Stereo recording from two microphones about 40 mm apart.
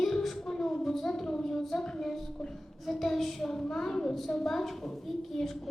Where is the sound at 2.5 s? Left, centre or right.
Centre.